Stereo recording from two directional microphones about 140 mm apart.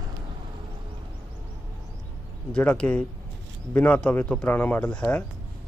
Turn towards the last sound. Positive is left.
turn(degrees=10)  # may be behind; listen again after turning